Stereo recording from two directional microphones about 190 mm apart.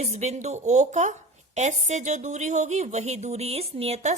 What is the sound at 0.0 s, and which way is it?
A woman's voice, 35° right (ahead or behind).